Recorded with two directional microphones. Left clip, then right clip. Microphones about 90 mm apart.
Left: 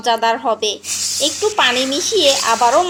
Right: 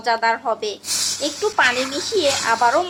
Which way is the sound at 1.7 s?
35° right (ahead or behind).